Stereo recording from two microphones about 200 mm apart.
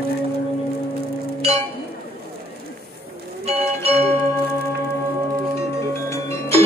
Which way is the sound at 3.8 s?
30° right (ahead or behind).